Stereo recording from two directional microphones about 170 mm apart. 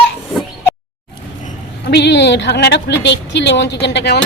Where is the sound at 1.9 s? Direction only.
85° left.